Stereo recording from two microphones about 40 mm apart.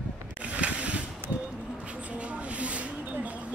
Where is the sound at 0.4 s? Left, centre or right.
Right.